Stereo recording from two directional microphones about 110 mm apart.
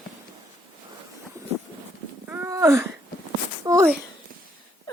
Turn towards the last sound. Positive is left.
turn(degrees=-35)  # may be behind; listen again after turning